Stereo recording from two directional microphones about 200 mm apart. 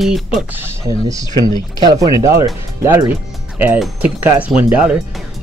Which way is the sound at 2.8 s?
10° right (ahead or behind).